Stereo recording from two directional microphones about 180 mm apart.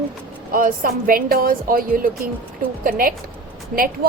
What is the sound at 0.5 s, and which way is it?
A woman's voice, 50° right (ahead or behind).